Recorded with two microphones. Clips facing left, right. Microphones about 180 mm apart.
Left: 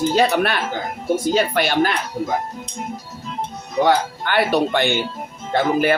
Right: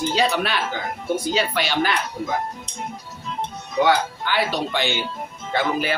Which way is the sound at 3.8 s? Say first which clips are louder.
Left 2 dB; 55° left (ahead or behind).